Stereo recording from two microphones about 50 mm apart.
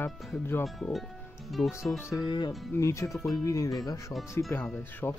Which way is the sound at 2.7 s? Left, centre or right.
Left.